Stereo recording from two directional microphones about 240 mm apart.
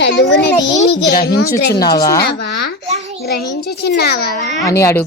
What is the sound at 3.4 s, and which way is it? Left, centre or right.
Speech, left.